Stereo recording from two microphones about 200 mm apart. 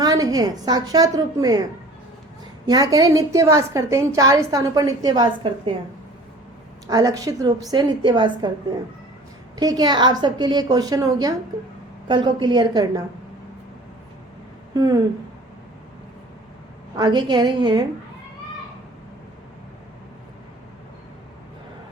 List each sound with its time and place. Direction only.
0.0 s a woman's voice: 20° right (ahead or behind)
2.6 s a woman's voice: 20° right (ahead or behind)
6.9 s a woman's voice: 20° right (ahead or behind)
9.6 s a woman's voice: 20° right (ahead or behind)
14.7 s speech: 20° right (ahead or behind)
17.0 s a woman's voice: 20° right (ahead or behind)